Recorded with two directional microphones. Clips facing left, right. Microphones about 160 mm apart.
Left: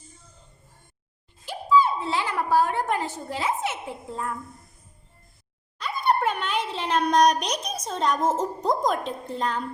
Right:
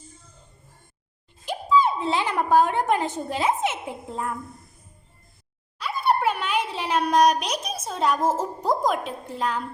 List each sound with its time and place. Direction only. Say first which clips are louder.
1.5 s speech: even; 20° right (ahead or behind)
5.8 s a child's voice: right 1 dB; 5° right (ahead or behind)